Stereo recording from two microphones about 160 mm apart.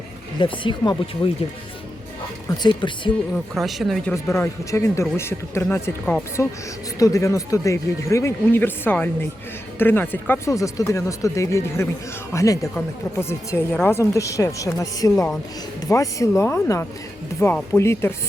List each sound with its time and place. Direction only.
0.3 s speech: 30° left (ahead or behind)
2.6 s speech: 30° left (ahead or behind)
3.3 s speech: centre (ahead or behind)
4.1 s speech: 15° left (ahead or behind)